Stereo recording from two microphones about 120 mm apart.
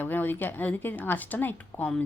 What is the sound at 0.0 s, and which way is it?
Speech, 15° left (ahead or behind).